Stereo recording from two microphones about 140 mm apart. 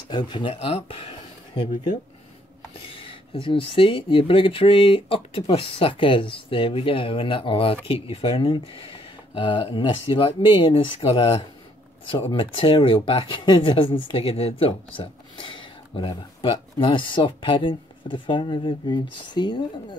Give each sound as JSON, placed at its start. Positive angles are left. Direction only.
{"t": 0.1, "sound": "speech", "side_deg": 35}
{"t": 2.7, "sound": "speech", "side_deg": 40}